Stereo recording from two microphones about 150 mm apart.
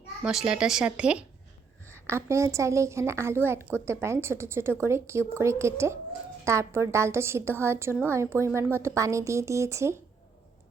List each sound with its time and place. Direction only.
0.3 s a woman's voice: 5° right (ahead or behind)